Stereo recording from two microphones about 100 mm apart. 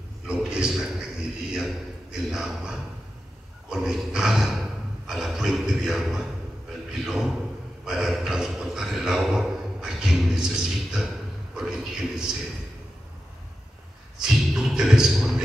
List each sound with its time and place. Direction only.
0.3 s a sound: 10° right (ahead or behind)
1.5 s a man's voice: 5° right (ahead or behind)
14.1 s speech: 5° right (ahead or behind)